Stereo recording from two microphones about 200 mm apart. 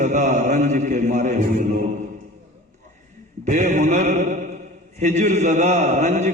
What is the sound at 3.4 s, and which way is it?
A man's voice, 40° right (ahead or behind).